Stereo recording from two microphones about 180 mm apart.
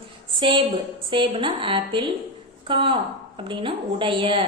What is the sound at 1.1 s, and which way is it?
A woman's voice, 30° right (ahead or behind).